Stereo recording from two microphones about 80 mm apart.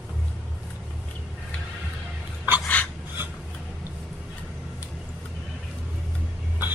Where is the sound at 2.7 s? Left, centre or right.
Centre.